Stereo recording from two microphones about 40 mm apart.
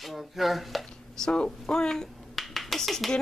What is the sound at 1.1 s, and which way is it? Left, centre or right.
Speech, left.